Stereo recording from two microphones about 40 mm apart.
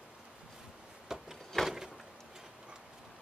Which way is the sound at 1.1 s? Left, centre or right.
Centre.